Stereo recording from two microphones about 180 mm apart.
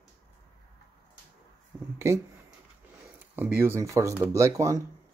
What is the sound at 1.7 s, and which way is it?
Speech, 5° right (ahead or behind).